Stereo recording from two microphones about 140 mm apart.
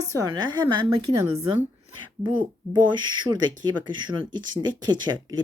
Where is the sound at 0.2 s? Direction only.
30° right (ahead or behind).